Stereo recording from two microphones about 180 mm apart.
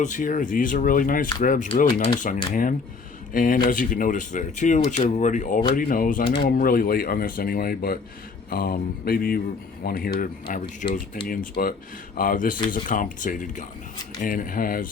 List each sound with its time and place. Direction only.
0.0 s speech: 45° left (ahead or behind)